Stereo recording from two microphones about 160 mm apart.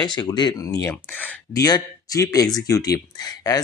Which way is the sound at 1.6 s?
25° left (ahead or behind).